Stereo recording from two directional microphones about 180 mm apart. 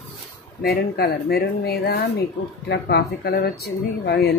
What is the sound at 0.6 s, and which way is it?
Speech, 60° left (ahead or behind).